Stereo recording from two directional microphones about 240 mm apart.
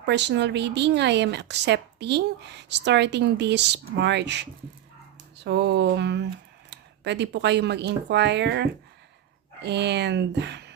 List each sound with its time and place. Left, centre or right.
0.0 s speech: right